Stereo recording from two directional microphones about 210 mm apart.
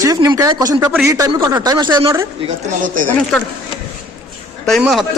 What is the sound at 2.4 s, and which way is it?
Speech, 35° right (ahead or behind).